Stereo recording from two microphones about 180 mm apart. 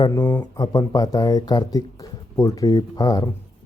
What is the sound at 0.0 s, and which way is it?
Speech, 20° left (ahead or behind).